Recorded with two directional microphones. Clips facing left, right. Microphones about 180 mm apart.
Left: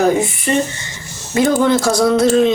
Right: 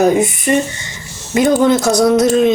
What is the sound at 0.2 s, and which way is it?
Speech, 20° right (ahead or behind).